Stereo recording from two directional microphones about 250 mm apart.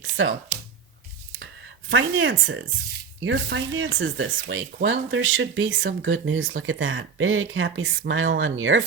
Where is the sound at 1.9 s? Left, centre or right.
Right.